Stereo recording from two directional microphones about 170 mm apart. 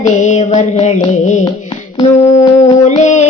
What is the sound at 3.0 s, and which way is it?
Music, 45° left (ahead or behind).